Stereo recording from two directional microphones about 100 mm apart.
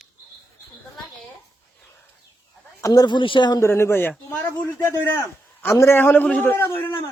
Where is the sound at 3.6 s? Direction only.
25° left (ahead or behind).